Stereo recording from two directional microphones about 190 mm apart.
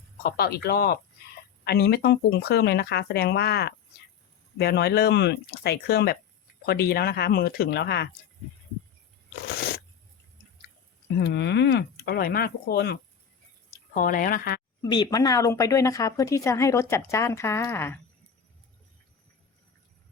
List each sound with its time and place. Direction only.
0.2 s speech: 55° left (ahead or behind)
9.6 s a sound: 55° left (ahead or behind)
11.2 s speech: 60° left (ahead or behind)
13.9 s speech: 45° left (ahead or behind)
14.8 s speech: 20° left (ahead or behind)